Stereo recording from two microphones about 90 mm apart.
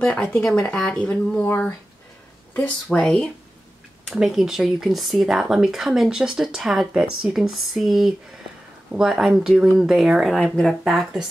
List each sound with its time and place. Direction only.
0.0 s speech: 10° left (ahead or behind)
1.4 s speech: 20° left (ahead or behind)
2.5 s speech: 10° left (ahead or behind); by 11.2 s 5° right (ahead or behind)